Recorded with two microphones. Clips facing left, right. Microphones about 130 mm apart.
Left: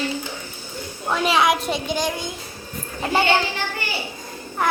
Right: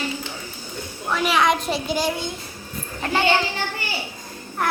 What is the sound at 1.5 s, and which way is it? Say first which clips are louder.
Speech: even; centre (ahead or behind).